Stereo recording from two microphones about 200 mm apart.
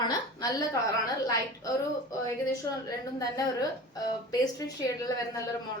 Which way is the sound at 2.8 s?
15° left (ahead or behind).